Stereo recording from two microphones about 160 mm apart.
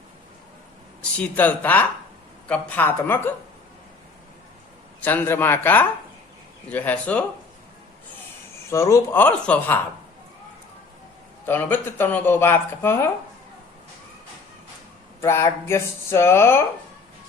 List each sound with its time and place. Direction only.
1.2 s speech: 10° left (ahead or behind)
4.9 s speech: 10° left (ahead or behind)
8.7 s speech: 20° left (ahead or behind)
11.4 s speech: 15° left (ahead or behind)
15.2 s speech: 15° left (ahead or behind)